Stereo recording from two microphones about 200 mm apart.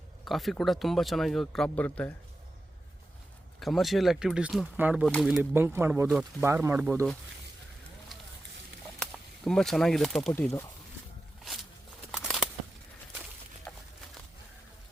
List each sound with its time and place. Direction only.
0.3 s speech: centre (ahead or behind)
3.6 s speech: centre (ahead or behind)
9.0 s speech: centre (ahead or behind)
12.1 s a sound: centre (ahead or behind)